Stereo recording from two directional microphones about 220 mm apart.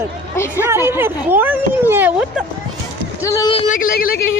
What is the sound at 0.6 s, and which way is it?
Speech, 10° right (ahead or behind).